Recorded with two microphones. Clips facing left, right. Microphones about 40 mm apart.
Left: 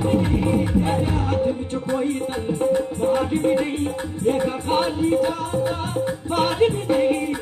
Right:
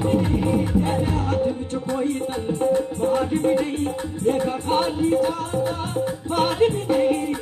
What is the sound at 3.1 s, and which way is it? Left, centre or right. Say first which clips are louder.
Music: left 1 dB; left.